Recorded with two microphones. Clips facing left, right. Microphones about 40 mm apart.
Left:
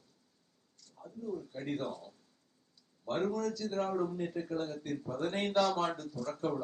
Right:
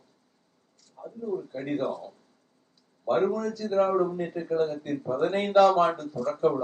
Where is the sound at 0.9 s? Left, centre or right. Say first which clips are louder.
Right 8 dB; right.